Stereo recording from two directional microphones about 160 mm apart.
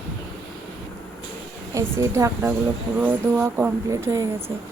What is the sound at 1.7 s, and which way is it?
A woman's voice, 20° right (ahead or behind).